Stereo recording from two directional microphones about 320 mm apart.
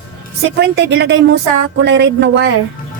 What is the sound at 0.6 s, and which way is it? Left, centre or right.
A woman's voice, right.